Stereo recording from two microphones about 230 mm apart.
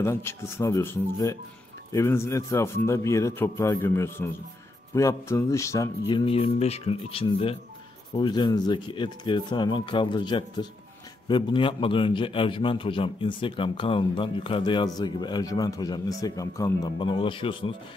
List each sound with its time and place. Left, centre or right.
0.0 s a man's voice: centre